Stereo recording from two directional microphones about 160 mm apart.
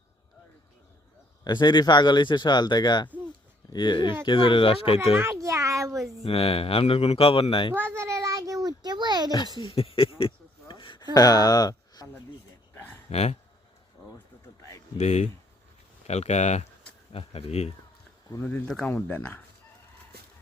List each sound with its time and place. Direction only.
1.5 s speech: 30° left (ahead or behind)
5.1 s a child's voice: 15° right (ahead or behind)
6.2 s speech: 35° left (ahead or behind)
7.7 s a sound: 15° right (ahead or behind)
9.3 s speech: 30° left (ahead or behind)
10.2 s a sound: 35° left (ahead or behind)
12.7 s a sound: 10° left (ahead or behind)
13.1 s speech: 40° left (ahead or behind)
14.9 s speech: 45° left (ahead or behind)
18.4 s speech: 5° left (ahead or behind)